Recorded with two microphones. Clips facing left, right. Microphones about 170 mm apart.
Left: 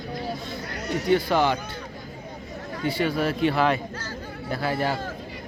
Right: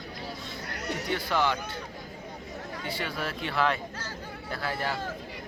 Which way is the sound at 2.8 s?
10° left (ahead or behind).